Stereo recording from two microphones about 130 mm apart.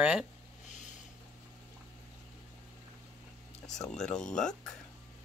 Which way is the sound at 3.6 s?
5° left (ahead or behind).